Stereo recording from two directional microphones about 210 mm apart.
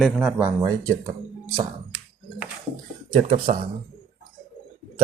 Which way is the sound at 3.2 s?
40° right (ahead or behind).